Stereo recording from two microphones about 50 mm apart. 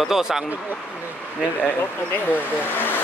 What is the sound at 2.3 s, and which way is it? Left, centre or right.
Speech, left.